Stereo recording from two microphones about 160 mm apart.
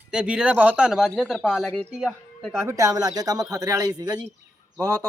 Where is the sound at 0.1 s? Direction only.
5° right (ahead or behind).